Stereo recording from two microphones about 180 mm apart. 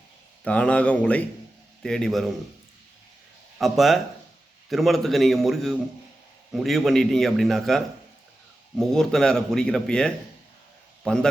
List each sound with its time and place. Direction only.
0.4 s a man's voice: 5° left (ahead or behind)
3.6 s a man's voice: centre (ahead or behind)